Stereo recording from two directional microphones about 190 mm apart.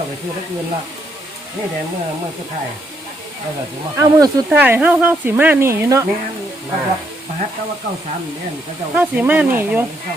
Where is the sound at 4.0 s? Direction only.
10° right (ahead or behind).